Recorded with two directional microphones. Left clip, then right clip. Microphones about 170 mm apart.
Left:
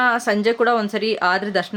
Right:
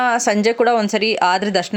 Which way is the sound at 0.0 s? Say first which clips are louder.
Right 2 dB; 40° right (ahead or behind).